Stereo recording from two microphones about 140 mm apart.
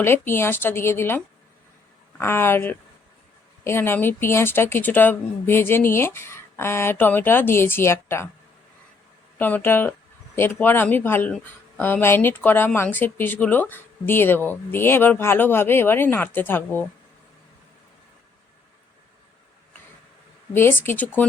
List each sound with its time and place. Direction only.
0.0 s speech: 15° left (ahead or behind)
9.4 s speech: 15° left (ahead or behind)
20.5 s speech: 15° left (ahead or behind)